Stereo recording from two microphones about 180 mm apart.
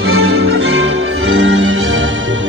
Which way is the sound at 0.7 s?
90° right.